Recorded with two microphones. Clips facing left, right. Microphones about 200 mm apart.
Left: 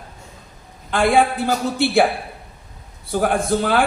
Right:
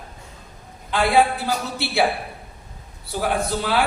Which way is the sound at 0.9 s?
50° left (ahead or behind).